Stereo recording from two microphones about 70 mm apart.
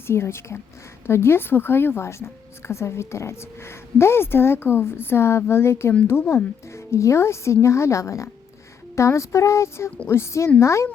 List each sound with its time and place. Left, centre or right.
0.1 s a woman's voice: left